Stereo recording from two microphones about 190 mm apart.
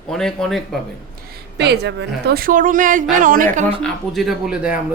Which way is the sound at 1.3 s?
60° right (ahead or behind).